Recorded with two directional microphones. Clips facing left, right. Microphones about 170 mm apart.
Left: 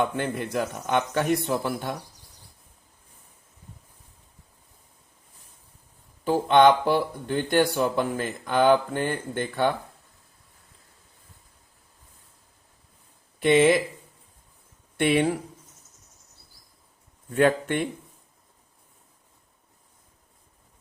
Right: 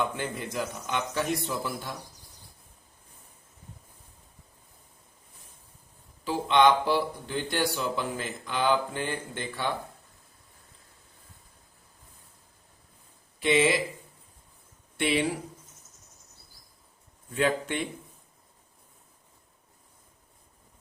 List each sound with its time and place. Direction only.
0.2 s a man's voice: 60° left (ahead or behind)
6.2 s speech: 50° left (ahead or behind)
13.4 s speech: 50° left (ahead or behind)
14.9 s speech: 55° left (ahead or behind)
17.3 s speech: 50° left (ahead or behind)